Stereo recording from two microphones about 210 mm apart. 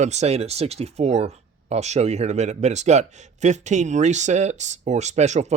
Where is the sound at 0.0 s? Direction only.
30° right (ahead or behind).